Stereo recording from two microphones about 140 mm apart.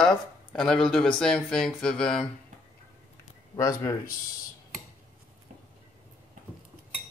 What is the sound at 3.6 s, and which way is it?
Speech, 25° left (ahead or behind).